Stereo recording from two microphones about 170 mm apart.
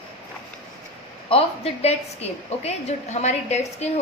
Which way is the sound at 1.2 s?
35° left (ahead or behind).